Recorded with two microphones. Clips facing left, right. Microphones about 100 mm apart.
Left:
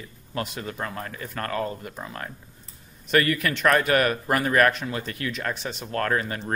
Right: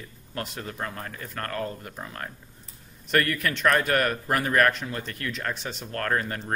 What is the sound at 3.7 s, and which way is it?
Speech, 90° left.